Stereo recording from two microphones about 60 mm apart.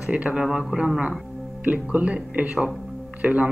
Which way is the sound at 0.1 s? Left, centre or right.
Centre.